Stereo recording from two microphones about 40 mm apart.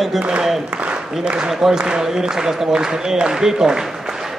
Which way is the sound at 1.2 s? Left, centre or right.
Right.